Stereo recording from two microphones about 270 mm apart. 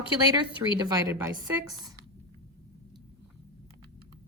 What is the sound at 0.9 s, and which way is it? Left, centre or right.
Speech, centre.